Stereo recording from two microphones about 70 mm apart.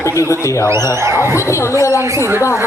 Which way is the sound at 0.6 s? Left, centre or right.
Right.